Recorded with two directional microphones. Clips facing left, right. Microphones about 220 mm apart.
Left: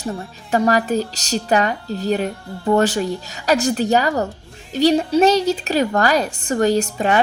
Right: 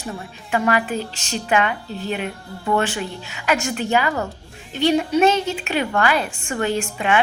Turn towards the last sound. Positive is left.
turn(degrees=40)  # may be behind; listen again after turning